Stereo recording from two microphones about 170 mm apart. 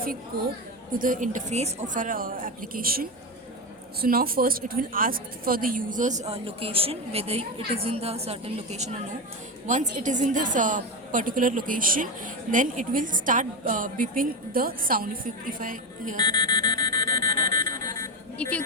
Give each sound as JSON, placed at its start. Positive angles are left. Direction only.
{"t": 0.9, "sound": "a woman's voice", "side_deg": -50}
{"t": 16.2, "sound": "buzzer", "side_deg": 25}
{"t": 17.6, "sound": "buzzer", "side_deg": -50}
{"t": 18.4, "sound": "speech", "side_deg": 5}